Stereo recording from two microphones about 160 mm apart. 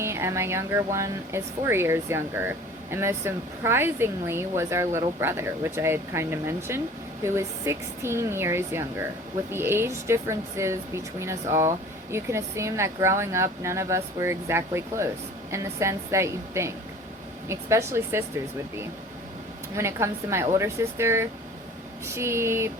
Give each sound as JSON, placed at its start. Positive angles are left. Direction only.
{"t": 0.0, "sound": "speech", "side_deg": -15}
{"t": 19.7, "sound": "speech", "side_deg": -15}